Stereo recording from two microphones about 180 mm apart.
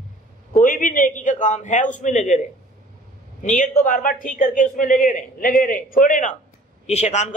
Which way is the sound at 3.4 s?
45° left (ahead or behind).